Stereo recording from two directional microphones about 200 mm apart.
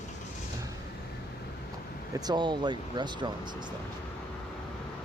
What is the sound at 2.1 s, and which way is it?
Speech, 20° right (ahead or behind).